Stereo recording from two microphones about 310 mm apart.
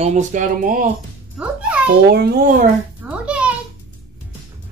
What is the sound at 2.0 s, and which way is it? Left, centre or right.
Speech, right.